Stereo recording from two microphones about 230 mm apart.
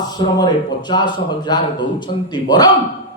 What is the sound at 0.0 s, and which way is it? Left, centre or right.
Speech, centre.